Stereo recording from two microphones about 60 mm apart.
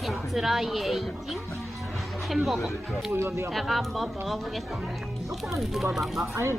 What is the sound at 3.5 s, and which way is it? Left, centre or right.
Speech, centre.